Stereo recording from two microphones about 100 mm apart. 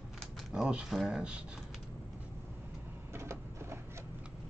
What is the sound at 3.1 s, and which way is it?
Printer, 25° right (ahead or behind).